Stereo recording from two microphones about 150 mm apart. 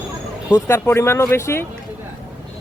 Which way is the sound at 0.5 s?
15° left (ahead or behind).